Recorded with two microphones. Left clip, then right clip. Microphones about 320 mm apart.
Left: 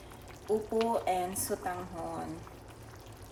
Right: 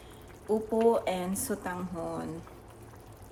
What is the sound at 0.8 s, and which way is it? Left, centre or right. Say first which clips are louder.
Speech: right 4 dB; centre.